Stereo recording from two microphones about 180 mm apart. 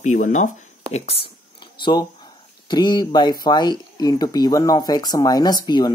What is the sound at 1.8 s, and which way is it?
Speech, 25° left (ahead or behind).